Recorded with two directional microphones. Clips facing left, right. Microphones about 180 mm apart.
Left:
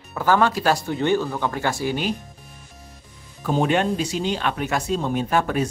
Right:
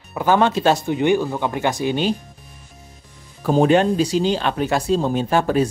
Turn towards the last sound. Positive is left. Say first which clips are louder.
# right 4 dB
turn(degrees=-30)  # may be behind; listen again after turning